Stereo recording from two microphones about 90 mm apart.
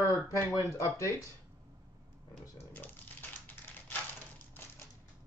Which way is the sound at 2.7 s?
20° left (ahead or behind).